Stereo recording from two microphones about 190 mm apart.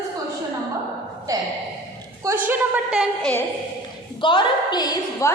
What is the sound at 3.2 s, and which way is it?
Speech, 10° left (ahead or behind).